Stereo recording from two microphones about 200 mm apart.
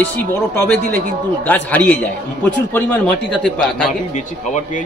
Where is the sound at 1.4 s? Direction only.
10° left (ahead or behind).